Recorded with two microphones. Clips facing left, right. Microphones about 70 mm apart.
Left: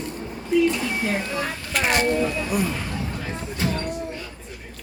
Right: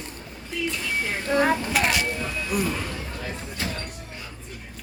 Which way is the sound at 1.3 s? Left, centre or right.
Right.